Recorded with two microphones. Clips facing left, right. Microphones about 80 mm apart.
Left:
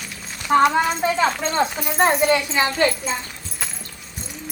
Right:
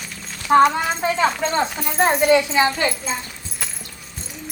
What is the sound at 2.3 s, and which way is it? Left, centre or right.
Speech, centre.